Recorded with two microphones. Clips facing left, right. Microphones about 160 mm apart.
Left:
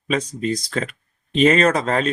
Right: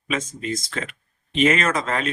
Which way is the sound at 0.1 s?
35° left (ahead or behind).